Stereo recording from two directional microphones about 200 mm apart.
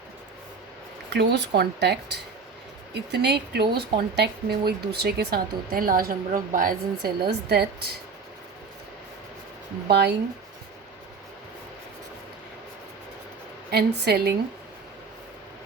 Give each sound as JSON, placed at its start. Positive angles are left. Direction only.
{"t": 1.1, "sound": "speech", "side_deg": -60}
{"t": 9.9, "sound": "speech", "side_deg": -55}
{"t": 13.7, "sound": "speech", "side_deg": -55}